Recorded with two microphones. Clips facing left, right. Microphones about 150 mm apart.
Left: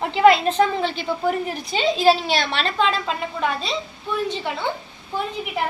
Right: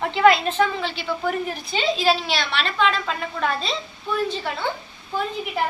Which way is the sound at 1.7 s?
20° left (ahead or behind).